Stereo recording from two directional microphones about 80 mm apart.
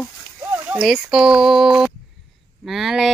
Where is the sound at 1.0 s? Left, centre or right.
Centre.